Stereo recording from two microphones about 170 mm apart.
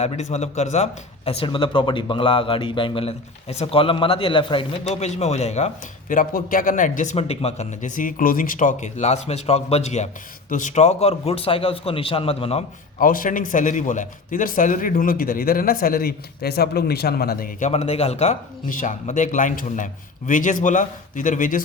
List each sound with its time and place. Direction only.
0.0 s a man's voice: 40° left (ahead or behind)
13.0 s a man's voice: 55° left (ahead or behind)
17.7 s speech: 40° left (ahead or behind)